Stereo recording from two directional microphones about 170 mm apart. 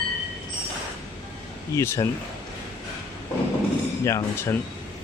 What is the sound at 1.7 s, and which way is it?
Speech, 15° left (ahead or behind).